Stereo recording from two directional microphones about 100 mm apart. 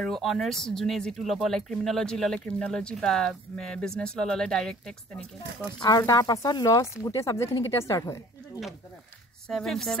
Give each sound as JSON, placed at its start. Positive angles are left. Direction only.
{"t": 0.0, "sound": "speech", "side_deg": 0}
{"t": 5.8, "sound": "a woman's voice", "side_deg": 35}
{"t": 9.5, "sound": "speech", "side_deg": 5}